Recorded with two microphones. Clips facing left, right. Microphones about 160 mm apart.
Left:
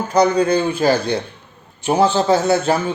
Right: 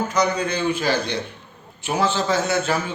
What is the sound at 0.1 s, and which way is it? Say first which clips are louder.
Speech: left 7 dB; 35° left (ahead or behind).